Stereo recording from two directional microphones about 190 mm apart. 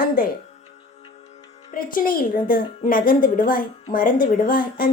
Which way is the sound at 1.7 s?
50° left (ahead or behind).